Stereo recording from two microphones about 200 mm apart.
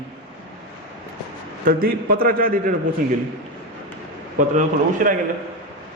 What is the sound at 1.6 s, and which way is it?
A man's voice, 50° right (ahead or behind).